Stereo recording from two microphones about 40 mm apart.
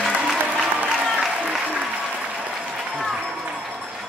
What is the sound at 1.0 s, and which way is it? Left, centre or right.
Applause, centre.